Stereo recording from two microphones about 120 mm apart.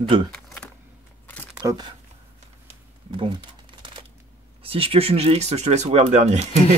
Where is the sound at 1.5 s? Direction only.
30° right (ahead or behind).